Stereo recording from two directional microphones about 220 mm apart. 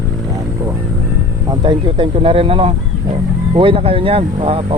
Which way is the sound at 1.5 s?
20° right (ahead or behind).